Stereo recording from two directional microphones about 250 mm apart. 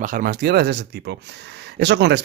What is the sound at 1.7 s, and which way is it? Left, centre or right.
Speech, right.